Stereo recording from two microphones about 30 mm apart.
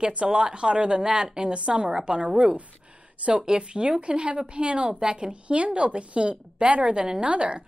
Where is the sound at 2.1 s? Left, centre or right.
Right.